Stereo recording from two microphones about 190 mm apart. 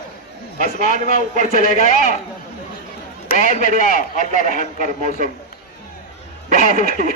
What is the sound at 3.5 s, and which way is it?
Speech, 40° left (ahead or behind).